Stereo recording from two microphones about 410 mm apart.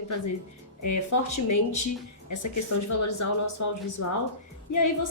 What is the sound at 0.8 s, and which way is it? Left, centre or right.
Speech, left.